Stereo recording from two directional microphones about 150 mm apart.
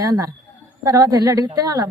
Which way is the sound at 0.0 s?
20° right (ahead or behind).